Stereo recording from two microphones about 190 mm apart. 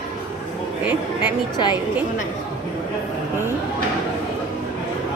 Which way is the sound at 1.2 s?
25° left (ahead or behind).